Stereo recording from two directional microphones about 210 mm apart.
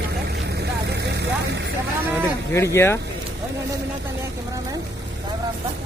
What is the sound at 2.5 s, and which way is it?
Speech, 15° left (ahead or behind).